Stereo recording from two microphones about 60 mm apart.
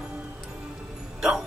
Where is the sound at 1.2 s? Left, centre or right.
Centre.